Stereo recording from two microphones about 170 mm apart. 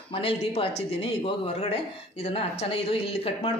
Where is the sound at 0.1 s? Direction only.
35° left (ahead or behind).